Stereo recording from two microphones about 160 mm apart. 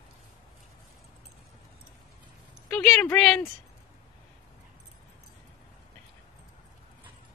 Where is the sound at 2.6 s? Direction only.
Centre (ahead or behind).